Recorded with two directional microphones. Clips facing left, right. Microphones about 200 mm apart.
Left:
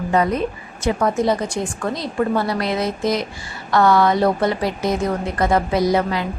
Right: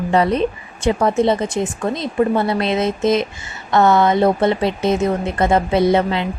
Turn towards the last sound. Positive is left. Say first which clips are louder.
# right 3 dB
turn(degrees=-25)  # may be behind; listen again after turning